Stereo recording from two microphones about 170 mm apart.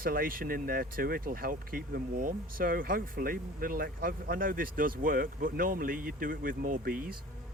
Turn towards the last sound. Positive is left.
turn(degrees=-55)  # may be behind; listen again after turning